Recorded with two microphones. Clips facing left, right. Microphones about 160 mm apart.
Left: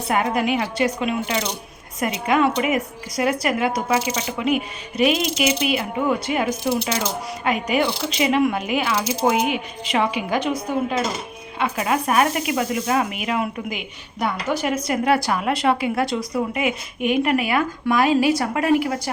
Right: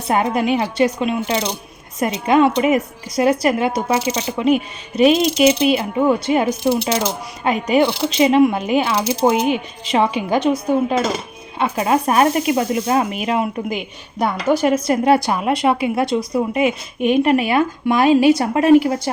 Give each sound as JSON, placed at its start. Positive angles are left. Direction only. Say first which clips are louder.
{"t": 0.1, "sound": "speech", "louder": "right 4 dB", "side_deg": -30}